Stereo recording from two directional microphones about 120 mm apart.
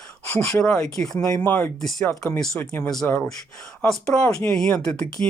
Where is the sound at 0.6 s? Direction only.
10° left (ahead or behind).